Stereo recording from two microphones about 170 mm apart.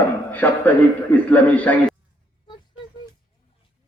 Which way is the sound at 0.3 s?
10° left (ahead or behind).